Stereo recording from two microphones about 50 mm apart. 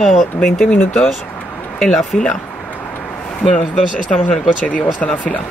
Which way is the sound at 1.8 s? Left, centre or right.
Centre.